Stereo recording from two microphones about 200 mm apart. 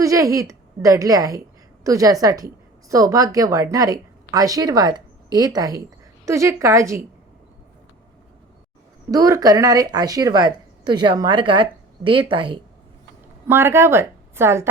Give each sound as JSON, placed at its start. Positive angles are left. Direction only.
{"t": 0.0, "sound": "a woman's voice", "side_deg": -15}
{"t": 9.0, "sound": "speech", "side_deg": -15}
{"t": 13.5, "sound": "a woman's voice", "side_deg": -10}